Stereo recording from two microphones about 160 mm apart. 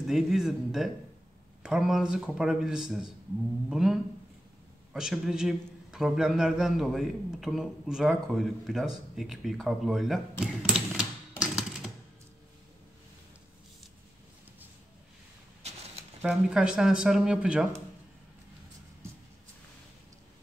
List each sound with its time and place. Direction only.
0.0 s a man's voice: centre (ahead or behind)
15.6 s a sound: 45° right (ahead or behind)
16.2 s a man's voice: 5° right (ahead or behind)